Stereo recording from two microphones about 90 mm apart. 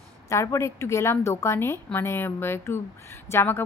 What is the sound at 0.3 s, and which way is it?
A woman's voice, 35° left (ahead or behind).